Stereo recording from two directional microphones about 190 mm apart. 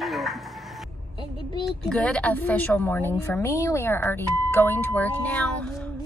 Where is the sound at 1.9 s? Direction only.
5° left (ahead or behind).